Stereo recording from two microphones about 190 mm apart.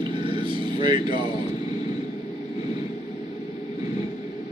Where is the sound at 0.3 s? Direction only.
25° right (ahead or behind).